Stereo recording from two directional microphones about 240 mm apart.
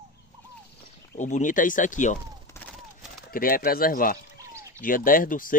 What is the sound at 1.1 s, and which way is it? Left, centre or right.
A man's voice, left.